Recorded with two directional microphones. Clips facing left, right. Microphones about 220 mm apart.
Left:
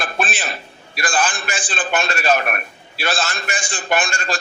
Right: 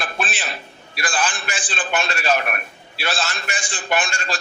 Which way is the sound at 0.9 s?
45° left (ahead or behind).